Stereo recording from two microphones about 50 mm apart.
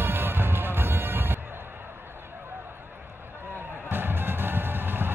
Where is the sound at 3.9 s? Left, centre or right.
Right.